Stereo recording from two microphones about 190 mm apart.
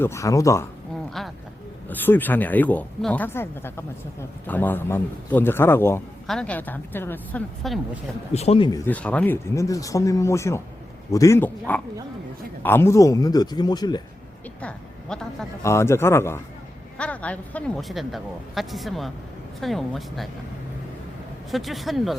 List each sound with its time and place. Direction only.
0.0 s speech: 15° left (ahead or behind)
1.9 s speech: 10° left (ahead or behind)
8.3 s speech: 35° left (ahead or behind)
8.8 s speech: 10° left (ahead or behind)
14.6 s a sound: 5° left (ahead or behind)
15.6 s speech: 15° left (ahead or behind)
21.5 s speech: centre (ahead or behind)